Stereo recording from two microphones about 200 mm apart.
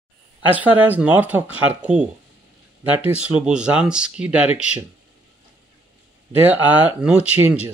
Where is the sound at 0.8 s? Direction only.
10° right (ahead or behind).